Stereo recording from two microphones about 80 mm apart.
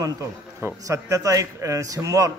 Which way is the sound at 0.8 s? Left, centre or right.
Right.